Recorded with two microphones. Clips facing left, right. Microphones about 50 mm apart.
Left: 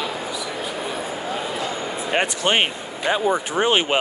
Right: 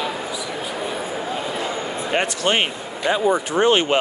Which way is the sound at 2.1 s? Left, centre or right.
Left.